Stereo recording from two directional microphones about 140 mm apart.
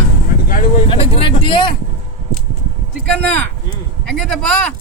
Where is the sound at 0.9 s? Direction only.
40° left (ahead or behind).